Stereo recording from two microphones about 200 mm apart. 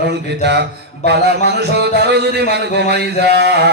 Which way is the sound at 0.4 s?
55° right (ahead or behind).